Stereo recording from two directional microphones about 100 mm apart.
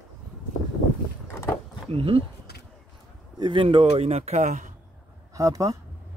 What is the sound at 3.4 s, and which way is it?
Speech, 60° right (ahead or behind).